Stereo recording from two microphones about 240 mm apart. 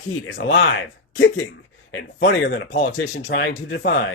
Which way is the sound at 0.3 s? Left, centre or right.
Left.